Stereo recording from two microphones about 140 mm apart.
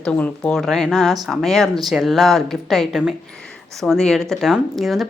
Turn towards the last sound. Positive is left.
turn(degrees=0)  # may be behind; listen again after turning